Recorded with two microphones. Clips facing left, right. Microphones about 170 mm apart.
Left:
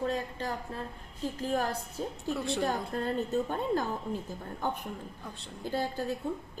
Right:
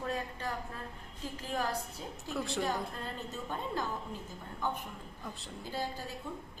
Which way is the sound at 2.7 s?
45° left (ahead or behind).